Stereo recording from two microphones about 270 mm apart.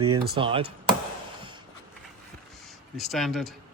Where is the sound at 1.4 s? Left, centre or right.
Centre.